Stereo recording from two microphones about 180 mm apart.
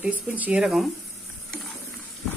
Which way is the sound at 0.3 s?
5° right (ahead or behind).